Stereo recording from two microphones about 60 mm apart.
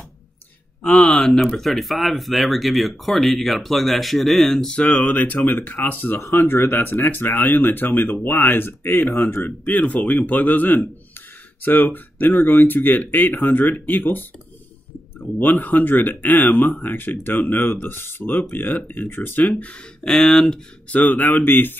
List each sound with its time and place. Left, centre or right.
0.8 s a sound: left
1.2 s speech: centre
4.7 s speech: left
9.7 s speech: left
15.3 s speech: left
19.5 s speech: centre
20.1 s speech: centre
20.9 s speech: left